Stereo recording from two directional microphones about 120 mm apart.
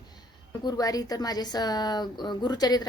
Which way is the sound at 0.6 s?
30° left (ahead or behind).